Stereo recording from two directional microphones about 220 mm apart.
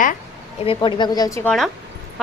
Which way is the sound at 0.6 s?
25° left (ahead or behind).